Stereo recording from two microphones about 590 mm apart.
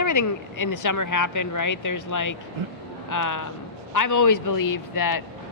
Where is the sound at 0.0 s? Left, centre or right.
Left.